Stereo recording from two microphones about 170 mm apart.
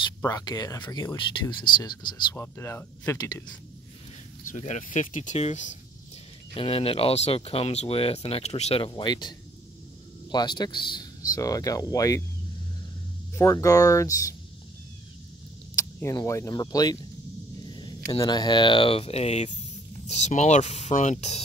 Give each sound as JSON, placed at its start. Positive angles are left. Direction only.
{"t": 0.2, "sound": "speech", "side_deg": 20}
{"t": 2.3, "sound": "speech", "side_deg": 15}
{"t": 4.5, "sound": "speech", "side_deg": 45}
{"t": 6.5, "sound": "speech", "side_deg": 35}
{"t": 10.3, "sound": "speech", "side_deg": 25}
{"t": 13.4, "sound": "speech", "side_deg": 20}
{"t": 15.7, "sound": "speech", "side_deg": 20}